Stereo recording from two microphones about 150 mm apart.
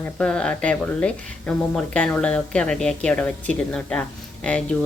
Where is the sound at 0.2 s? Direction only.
5° left (ahead or behind).